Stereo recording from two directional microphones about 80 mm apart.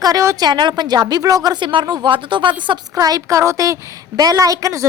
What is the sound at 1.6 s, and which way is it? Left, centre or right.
Speech, right.